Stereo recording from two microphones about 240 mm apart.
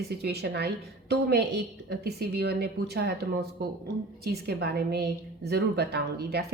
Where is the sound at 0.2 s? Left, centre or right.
Right.